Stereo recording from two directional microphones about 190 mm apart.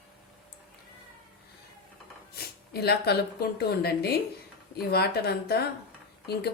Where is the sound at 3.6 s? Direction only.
55° left (ahead or behind).